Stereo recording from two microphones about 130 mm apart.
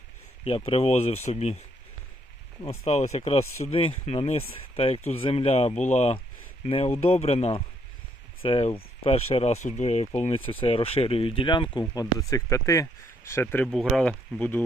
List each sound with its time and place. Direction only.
0.4 s speech: 45° left (ahead or behind)
2.6 s speech: 55° left (ahead or behind)
10.6 s speech: 45° left (ahead or behind); by 13.7 s 15° left (ahead or behind)
13.7 s speech: centre (ahead or behind)